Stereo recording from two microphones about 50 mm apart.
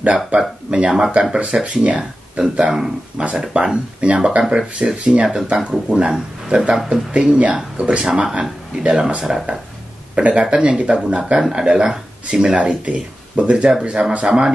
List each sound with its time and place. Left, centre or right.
0.4 s speech: centre
8.0 s speech: centre